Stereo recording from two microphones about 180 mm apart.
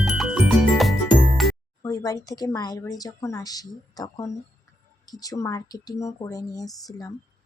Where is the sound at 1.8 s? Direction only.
20° left (ahead or behind).